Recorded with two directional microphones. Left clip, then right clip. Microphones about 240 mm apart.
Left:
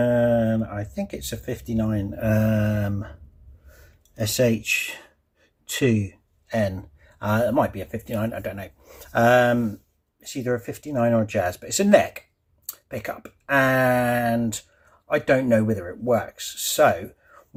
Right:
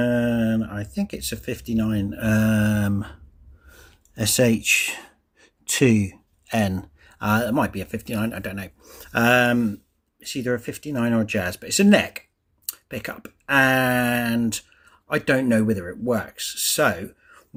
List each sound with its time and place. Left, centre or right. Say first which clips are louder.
0.0 s speech: left 3 dB; right